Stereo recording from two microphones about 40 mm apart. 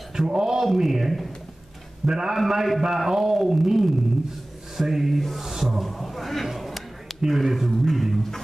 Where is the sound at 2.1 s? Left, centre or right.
Centre.